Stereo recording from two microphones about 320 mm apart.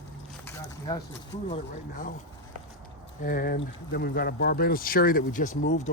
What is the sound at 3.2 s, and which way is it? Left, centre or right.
Speech, left.